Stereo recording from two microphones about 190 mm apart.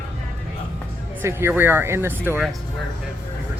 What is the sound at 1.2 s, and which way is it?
Speech, 10° right (ahead or behind).